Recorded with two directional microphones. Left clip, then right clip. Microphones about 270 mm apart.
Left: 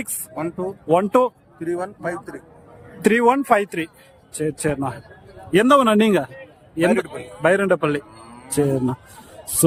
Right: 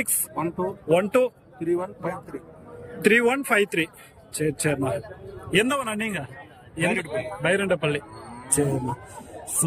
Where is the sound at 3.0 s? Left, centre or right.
Centre.